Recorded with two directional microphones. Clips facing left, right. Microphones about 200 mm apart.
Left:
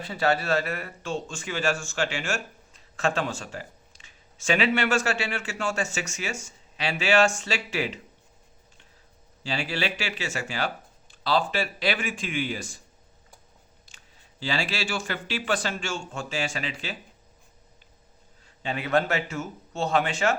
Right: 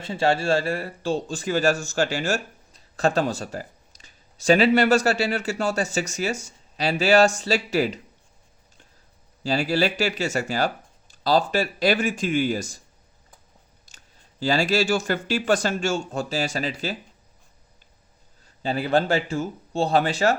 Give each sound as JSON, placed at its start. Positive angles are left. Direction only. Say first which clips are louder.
{"t": 0.0, "sound": "a man's voice", "louder": "right 3 dB", "side_deg": -25}
{"t": 9.4, "sound": "a man's voice", "louder": "right 7 dB", "side_deg": -40}
{"t": 13.8, "sound": "speech", "louder": "even", "side_deg": -40}
{"t": 18.4, "sound": "a man's voice", "louder": "right 5 dB", "side_deg": -35}